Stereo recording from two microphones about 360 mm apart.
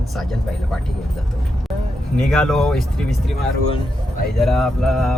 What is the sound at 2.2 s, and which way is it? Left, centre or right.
Speech, centre.